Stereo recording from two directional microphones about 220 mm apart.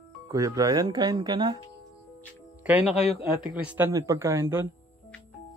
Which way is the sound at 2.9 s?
30° left (ahead or behind).